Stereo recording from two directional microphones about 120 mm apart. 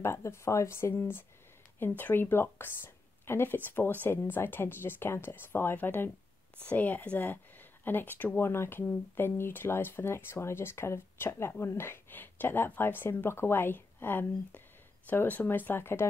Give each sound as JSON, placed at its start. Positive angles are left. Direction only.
{"t": 0.0, "sound": "speech", "side_deg": 20}